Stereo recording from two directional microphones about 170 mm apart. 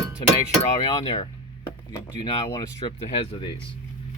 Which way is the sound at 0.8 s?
25° left (ahead or behind).